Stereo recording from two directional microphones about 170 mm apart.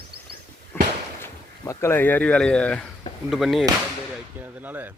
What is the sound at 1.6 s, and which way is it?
Speech, 15° left (ahead or behind).